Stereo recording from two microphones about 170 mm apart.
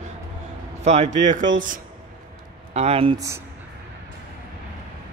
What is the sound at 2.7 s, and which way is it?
Speech, 40° right (ahead or behind).